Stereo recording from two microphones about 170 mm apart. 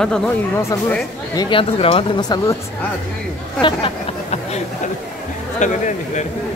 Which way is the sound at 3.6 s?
35° left (ahead or behind).